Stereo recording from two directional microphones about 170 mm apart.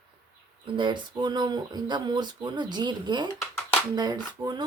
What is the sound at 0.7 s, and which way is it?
Speech, 30° right (ahead or behind).